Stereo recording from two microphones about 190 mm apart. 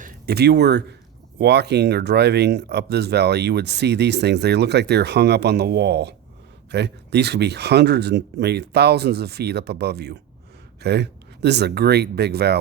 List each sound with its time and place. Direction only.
0.0 s speech: 50° right (ahead or behind)